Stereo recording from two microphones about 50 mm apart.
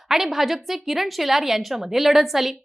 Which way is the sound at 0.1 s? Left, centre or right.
Centre.